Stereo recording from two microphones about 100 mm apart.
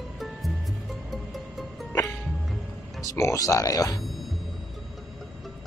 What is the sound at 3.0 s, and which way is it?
Speech, 30° left (ahead or behind).